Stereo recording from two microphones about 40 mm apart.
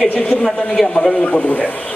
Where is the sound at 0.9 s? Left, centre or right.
Left.